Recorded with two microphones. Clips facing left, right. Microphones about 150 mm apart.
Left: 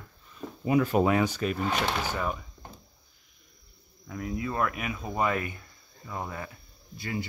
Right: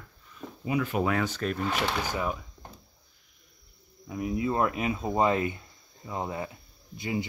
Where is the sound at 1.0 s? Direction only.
15° left (ahead or behind); by 2.4 s centre (ahead or behind).